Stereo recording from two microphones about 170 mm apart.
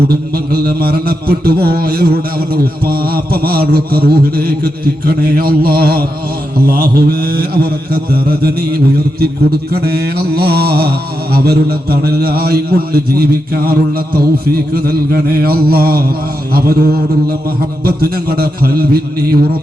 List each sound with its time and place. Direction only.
0.1 s a man's voice: 65° right (ahead or behind)